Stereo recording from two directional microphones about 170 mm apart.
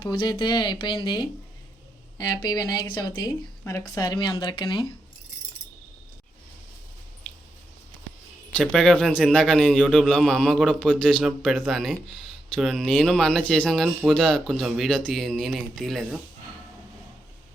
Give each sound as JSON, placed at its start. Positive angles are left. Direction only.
{"t": 0.0, "sound": "speech", "side_deg": 25}
{"t": 8.5, "sound": "speech", "side_deg": 5}